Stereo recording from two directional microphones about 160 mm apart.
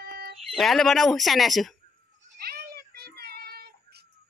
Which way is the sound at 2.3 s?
75° right (ahead or behind).